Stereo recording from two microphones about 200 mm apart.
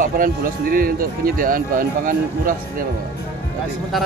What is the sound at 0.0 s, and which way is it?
Speech, 45° right (ahead or behind).